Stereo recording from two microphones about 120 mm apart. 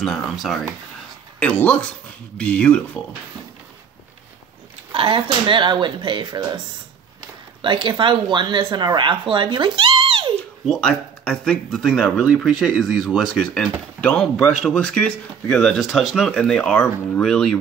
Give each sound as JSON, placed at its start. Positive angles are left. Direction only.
{"t": 0.0, "sound": "speech", "side_deg": 5}
{"t": 4.9, "sound": "speech", "side_deg": -45}
{"t": 7.6, "sound": "speech", "side_deg": -40}
{"t": 10.7, "sound": "speech", "side_deg": 5}